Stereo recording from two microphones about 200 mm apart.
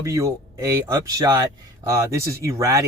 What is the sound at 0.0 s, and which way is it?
Speech, 15° right (ahead or behind).